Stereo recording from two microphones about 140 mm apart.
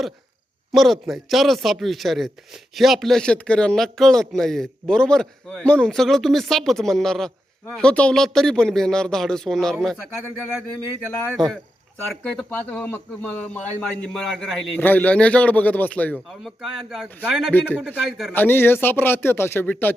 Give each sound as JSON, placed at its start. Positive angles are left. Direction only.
{"t": 0.7, "sound": "a man's voice", "side_deg": 0}
{"t": 12.2, "sound": "a man's voice", "side_deg": 10}
{"t": 14.8, "sound": "speech", "side_deg": 10}
{"t": 16.1, "sound": "a man's voice", "side_deg": 0}
{"t": 18.3, "sound": "speech", "side_deg": 15}